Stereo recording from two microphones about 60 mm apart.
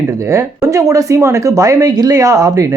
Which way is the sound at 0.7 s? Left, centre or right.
Right.